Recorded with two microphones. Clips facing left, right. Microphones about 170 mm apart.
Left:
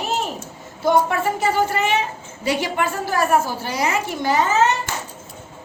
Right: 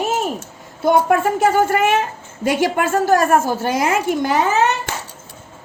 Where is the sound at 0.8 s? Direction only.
50° right (ahead or behind).